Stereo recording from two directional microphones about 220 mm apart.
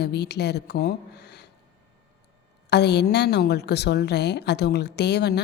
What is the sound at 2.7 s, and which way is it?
A woman's voice, 50° left (ahead or behind).